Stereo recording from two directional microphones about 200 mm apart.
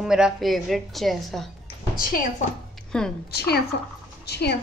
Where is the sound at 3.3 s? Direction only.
55° left (ahead or behind).